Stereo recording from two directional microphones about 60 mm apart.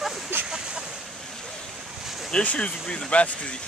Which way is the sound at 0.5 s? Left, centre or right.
Centre.